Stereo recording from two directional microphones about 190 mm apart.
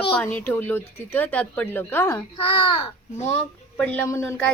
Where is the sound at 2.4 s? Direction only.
25° left (ahead or behind).